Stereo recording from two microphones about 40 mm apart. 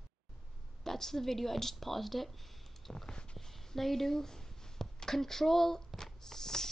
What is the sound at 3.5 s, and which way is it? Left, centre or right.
Speech, centre.